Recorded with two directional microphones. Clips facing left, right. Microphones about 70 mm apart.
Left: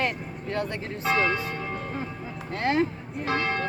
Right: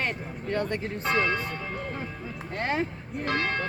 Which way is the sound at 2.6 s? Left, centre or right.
Centre.